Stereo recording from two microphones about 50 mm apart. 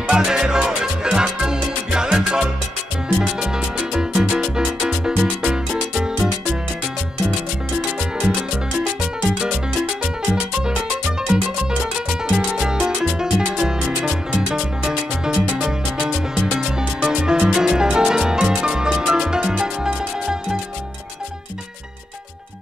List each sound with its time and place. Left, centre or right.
0.1 s music: centre
3.2 s salsa music: centre
3.9 s music: centre
9.3 s music: centre